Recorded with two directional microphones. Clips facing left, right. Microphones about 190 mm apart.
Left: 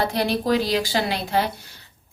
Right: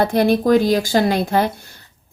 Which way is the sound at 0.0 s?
50° right (ahead or behind).